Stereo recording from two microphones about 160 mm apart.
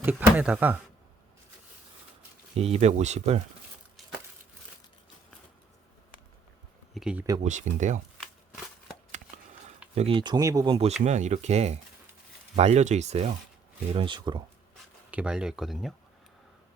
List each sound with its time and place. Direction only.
0.0 s speech: 10° right (ahead or behind)
2.6 s speech: 40° right (ahead or behind)
6.9 s speech: 5° right (ahead or behind)
7.4 s speech: 50° right (ahead or behind)
9.9 s speech: 40° right (ahead or behind); by 10.8 s 20° right (ahead or behind)
11.0 s speech: 45° right (ahead or behind)
13.9 s speech: 30° right (ahead or behind)
15.1 s speech: 5° right (ahead or behind)